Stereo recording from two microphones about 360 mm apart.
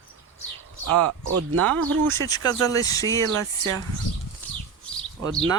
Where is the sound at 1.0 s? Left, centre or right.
Right.